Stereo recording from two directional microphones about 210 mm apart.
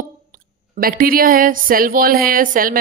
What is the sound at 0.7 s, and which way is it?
Speech, 45° right (ahead or behind).